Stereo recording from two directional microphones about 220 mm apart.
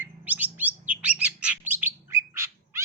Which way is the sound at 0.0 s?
10° right (ahead or behind).